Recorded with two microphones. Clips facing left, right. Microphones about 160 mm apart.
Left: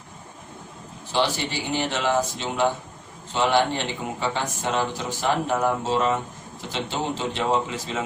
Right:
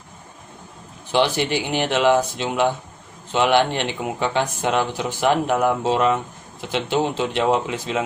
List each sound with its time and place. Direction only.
1.1 s speech: 65° right (ahead or behind)
1.5 s speech: 15° right (ahead or behind)
1.8 s speech: 65° right (ahead or behind)